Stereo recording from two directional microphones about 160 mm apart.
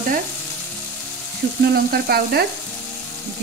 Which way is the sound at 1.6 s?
75° right (ahead or behind).